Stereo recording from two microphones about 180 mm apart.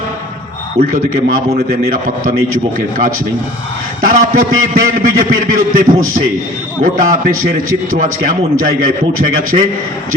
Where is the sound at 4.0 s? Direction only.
50° right (ahead or behind).